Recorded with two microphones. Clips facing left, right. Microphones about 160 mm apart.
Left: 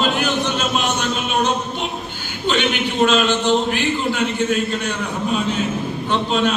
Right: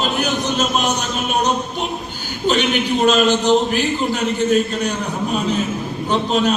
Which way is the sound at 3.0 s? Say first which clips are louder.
Right 2 dB; 40° right (ahead or behind).